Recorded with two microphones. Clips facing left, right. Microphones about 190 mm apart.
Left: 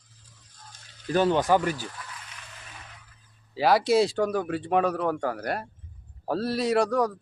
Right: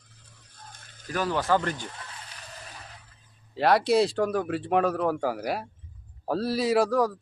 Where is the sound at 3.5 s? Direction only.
Centre (ahead or behind).